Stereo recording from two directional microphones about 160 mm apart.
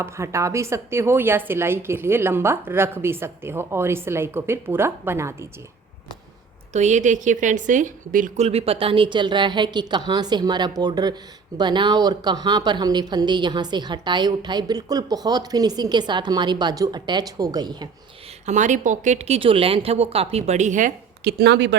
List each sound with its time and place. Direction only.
0.0 s a woman's voice: 20° right (ahead or behind)
6.7 s a woman's voice: 50° right (ahead or behind); by 17.8 s 25° right (ahead or behind)
18.4 s speech: 50° right (ahead or behind)
21.2 s speech: 85° right